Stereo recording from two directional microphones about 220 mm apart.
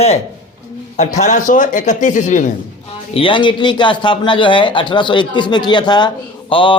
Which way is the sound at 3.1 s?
25° left (ahead or behind).